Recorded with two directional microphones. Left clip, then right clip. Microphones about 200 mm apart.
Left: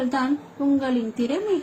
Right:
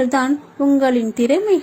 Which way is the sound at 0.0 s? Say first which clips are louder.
Right 7 dB; 30° right (ahead or behind).